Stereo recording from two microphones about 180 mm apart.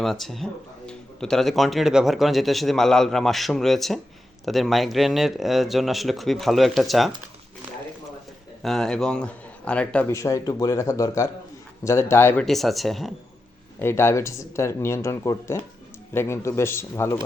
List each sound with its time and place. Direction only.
0.0 s speech: centre (ahead or behind)
8.6 s a man's voice: centre (ahead or behind)
12.5 s speech: centre (ahead or behind)
13.7 s a man's voice: 15° left (ahead or behind)